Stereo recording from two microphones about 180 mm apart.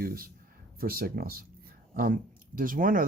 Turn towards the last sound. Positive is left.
turn(degrees=-50)  # may be behind; listen again after turning